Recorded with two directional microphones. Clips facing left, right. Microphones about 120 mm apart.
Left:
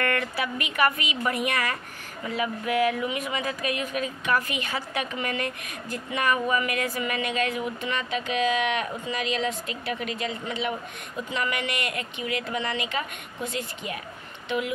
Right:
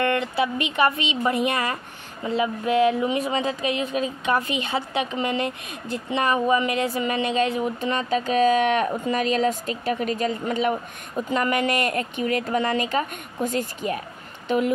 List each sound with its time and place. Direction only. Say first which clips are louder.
0.0 s a woman's voice: right 5 dB; 20° right (ahead or behind); by 14.0 s 40° right (ahead or behind)